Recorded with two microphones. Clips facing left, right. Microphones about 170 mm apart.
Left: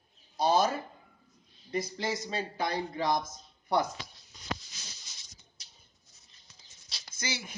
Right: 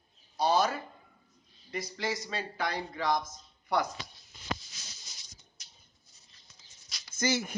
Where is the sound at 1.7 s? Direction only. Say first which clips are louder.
Left 2 dB; 25° left (ahead or behind).